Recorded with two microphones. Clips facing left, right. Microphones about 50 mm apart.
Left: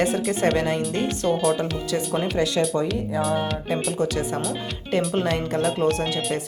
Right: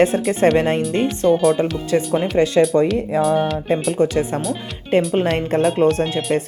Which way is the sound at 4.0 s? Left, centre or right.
Right.